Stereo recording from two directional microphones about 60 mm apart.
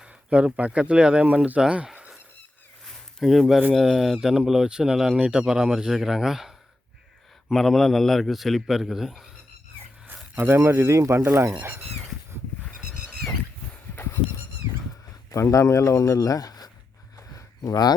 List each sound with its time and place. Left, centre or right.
0.0 s speech: centre
3.2 s a man's voice: centre
5.1 s speech: centre
7.5 s a man's voice: centre
10.3 s speech: right
10.9 s speech: right
13.1 s a sound: centre
13.9 s goat: left
15.3 s speech: left
17.2 s a sound: left